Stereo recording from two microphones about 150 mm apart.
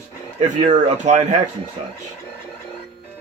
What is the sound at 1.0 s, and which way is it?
Speech, 50° right (ahead or behind).